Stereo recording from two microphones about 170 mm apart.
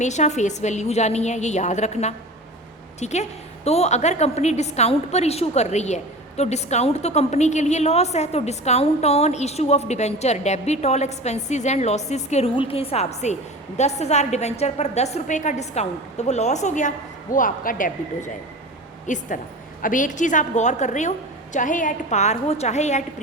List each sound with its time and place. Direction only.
0.0 s a woman's voice: 45° left (ahead or behind)